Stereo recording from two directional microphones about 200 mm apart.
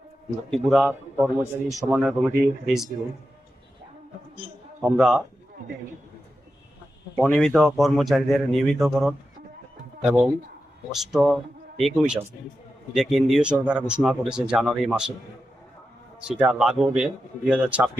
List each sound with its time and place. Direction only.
0.5 s a man's voice: centre (ahead or behind)
1.1 s a man's voice: 10° right (ahead or behind)
4.8 s a man's voice: 5° right (ahead or behind)
7.2 s a man's voice: 5° left (ahead or behind)
16.2 s a man's voice: 5° right (ahead or behind)